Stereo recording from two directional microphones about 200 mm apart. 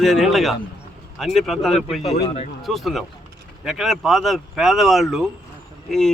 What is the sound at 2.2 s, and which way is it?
Speech, 30° left (ahead or behind).